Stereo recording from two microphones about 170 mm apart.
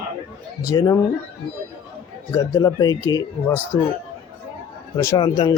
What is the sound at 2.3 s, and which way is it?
Speech, 20° left (ahead or behind).